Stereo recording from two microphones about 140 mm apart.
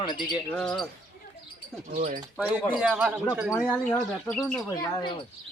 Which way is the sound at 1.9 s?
70° right (ahead or behind).